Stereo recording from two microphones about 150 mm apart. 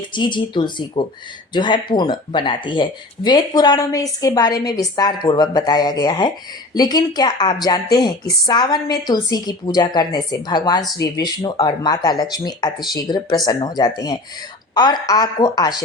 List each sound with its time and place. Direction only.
0.1 s speech: 30° left (ahead or behind)